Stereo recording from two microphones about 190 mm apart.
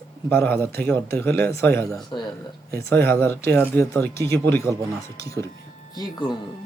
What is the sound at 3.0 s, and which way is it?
Speech, 10° left (ahead or behind).